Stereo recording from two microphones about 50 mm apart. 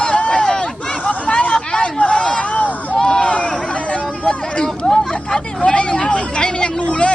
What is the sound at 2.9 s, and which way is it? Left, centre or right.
Hubbub, centre.